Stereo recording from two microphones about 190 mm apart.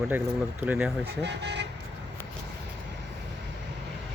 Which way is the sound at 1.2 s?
65° right (ahead or behind).